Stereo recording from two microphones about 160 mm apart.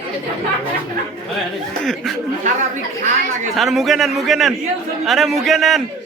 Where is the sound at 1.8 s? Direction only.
Centre (ahead or behind).